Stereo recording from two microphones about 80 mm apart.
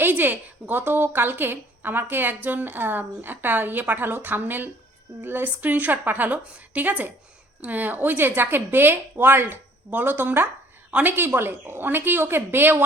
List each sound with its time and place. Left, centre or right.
0.0 s a woman's voice: right